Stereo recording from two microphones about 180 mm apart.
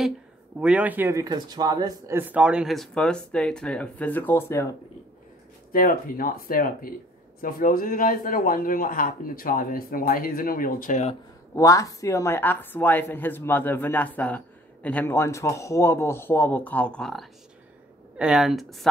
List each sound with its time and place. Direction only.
0.6 s a man's voice: 5° right (ahead or behind); by 4.7 s 15° left (ahead or behind)
5.7 s a man's voice: 55° left (ahead or behind)
11.5 s speech: 15° left (ahead or behind); by 18.9 s centre (ahead or behind)